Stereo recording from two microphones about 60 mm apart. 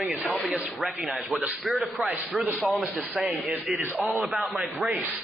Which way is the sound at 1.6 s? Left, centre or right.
Centre.